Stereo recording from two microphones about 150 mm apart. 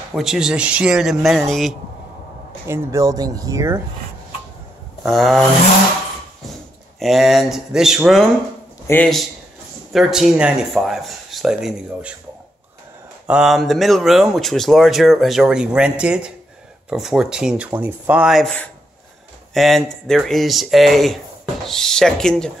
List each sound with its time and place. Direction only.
0.1 s speech: 5° right (ahead or behind)
2.6 s speech: 20° right (ahead or behind)
5.0 s speech: centre (ahead or behind)
7.0 s speech: centre (ahead or behind)
8.9 s a man's voice: 20° left (ahead or behind)
9.9 s speech: 5° right (ahead or behind)
13.3 s speech: 5° right (ahead or behind)